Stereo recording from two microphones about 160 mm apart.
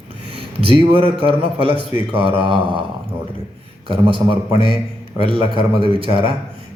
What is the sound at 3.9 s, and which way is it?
A man's voice, 35° right (ahead or behind).